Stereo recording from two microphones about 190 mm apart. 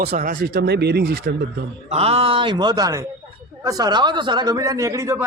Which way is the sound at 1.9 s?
35° right (ahead or behind).